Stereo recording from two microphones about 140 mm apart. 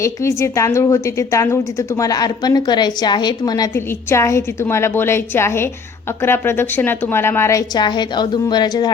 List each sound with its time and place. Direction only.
0.0 s a woman's voice: 20° left (ahead or behind)
7.8 s a woman's voice: 30° left (ahead or behind)